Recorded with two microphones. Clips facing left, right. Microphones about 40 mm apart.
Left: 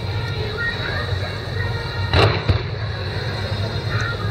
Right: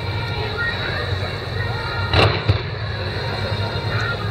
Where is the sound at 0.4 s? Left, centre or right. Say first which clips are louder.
Right 1 dB; centre.